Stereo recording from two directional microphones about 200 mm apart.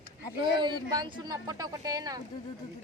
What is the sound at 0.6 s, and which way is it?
Speech, 20° right (ahead or behind).